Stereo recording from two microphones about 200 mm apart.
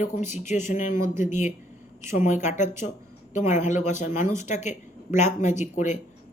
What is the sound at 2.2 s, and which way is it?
A woman's voice, 35° left (ahead or behind).